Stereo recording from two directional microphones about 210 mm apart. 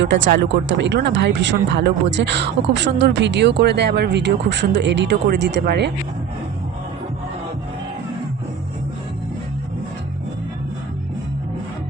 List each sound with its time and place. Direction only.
0.0 s speech: 60° right (ahead or behind)